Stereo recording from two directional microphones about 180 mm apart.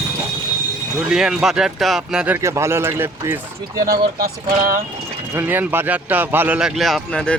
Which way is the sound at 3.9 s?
55° right (ahead or behind).